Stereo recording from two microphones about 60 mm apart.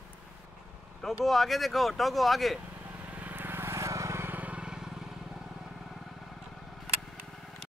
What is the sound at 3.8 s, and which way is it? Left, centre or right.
Vehicle, right.